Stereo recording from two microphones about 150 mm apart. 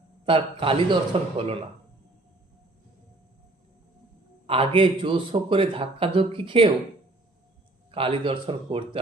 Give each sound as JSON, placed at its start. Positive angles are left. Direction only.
{"t": 0.3, "sound": "a man's voice", "side_deg": -35}
{"t": 4.4, "sound": "a man's voice", "side_deg": -40}
{"t": 7.9, "sound": "a man's voice", "side_deg": -40}